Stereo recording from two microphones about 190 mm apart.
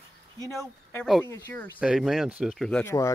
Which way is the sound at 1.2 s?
15° left (ahead or behind).